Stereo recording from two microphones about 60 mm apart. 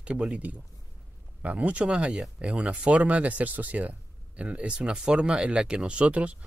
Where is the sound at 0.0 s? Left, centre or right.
Centre.